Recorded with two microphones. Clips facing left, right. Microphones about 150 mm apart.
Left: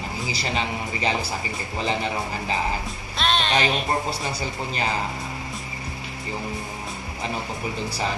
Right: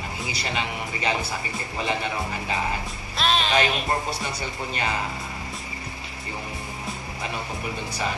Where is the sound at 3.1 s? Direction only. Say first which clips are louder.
Even; centre (ahead or behind).